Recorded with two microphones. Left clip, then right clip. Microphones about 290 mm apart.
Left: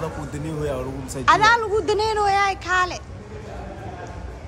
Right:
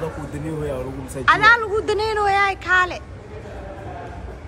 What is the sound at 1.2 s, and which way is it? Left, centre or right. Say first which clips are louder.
Speech: right 2 dB; centre.